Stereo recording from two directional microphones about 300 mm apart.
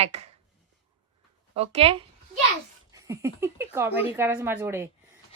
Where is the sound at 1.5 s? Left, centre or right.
Right.